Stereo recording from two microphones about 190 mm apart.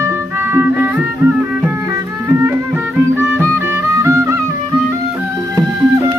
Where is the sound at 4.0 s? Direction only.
15° right (ahead or behind).